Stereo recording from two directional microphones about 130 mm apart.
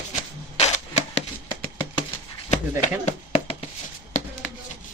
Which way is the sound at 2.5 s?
60° left (ahead or behind).